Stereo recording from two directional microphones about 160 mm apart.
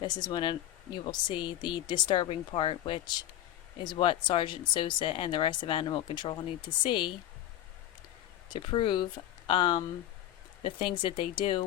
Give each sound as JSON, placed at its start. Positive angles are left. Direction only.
{"t": 0.0, "sound": "speech", "side_deg": 30}
{"t": 8.4, "sound": "speech", "side_deg": 30}